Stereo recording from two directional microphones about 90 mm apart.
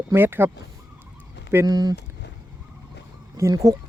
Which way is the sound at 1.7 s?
45° right (ahead or behind).